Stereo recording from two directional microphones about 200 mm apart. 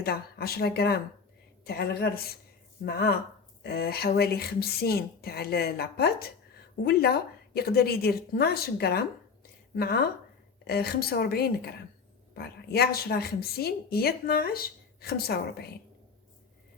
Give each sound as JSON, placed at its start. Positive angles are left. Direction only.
{"t": 0.0, "sound": "a woman's voice", "side_deg": 50}